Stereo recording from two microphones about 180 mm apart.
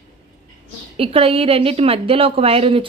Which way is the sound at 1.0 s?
30° right (ahead or behind).